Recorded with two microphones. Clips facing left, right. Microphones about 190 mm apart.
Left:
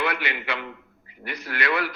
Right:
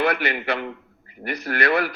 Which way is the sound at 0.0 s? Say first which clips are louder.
Right 5 dB; 40° right (ahead or behind).